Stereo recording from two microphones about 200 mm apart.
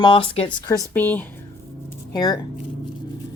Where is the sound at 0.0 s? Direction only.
25° left (ahead or behind).